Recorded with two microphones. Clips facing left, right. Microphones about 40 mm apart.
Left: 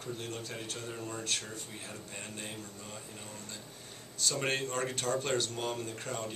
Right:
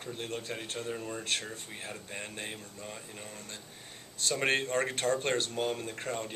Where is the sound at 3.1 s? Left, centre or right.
Centre.